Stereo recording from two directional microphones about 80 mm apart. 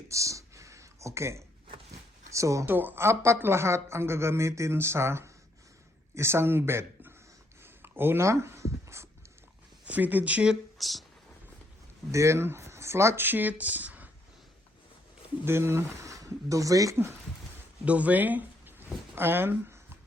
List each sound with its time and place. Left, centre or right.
0.1 s a sound: right
2.3 s speech: right
2.6 s speech: right
7.6 s writing: right
9.8 s speech: right
10.8 s speech: centre
12.1 s speech: right
13.2 s speech: right
15.4 s speech: right
17.8 s speech: centre